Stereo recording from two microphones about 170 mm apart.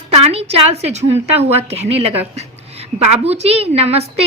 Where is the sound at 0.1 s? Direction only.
35° right (ahead or behind).